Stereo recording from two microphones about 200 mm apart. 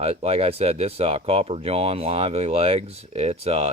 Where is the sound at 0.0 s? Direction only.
30° right (ahead or behind).